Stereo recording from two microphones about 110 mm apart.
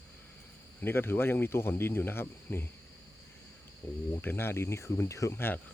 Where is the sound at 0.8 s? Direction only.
20° left (ahead or behind).